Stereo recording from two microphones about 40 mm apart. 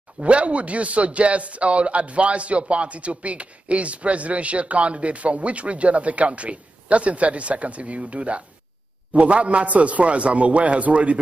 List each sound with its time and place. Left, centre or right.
0.2 s a man's voice: right